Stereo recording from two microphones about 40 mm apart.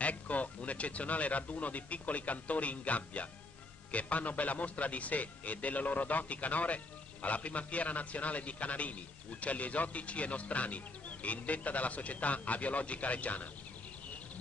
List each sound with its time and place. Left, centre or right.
0.0 s a man's voice: left